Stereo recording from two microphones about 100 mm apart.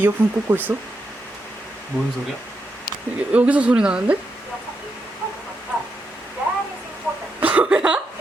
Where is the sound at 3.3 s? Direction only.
15° right (ahead or behind).